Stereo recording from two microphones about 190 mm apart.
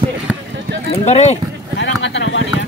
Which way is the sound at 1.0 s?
35° left (ahead or behind).